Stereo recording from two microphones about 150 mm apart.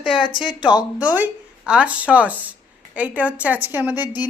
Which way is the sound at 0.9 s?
10° right (ahead or behind).